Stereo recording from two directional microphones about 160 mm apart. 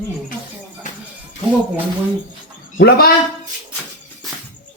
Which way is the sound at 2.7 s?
75° left (ahead or behind).